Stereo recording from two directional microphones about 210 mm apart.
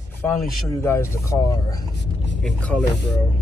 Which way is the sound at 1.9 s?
55° left (ahead or behind).